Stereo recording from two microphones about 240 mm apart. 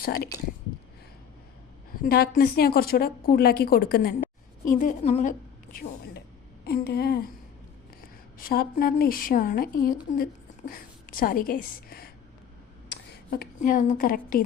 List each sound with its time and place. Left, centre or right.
0.0 s a woman's voice: left
2.0 s a woman's voice: left
6.7 s a woman's voice: left
8.4 s a woman's voice: left
11.1 s a woman's voice: left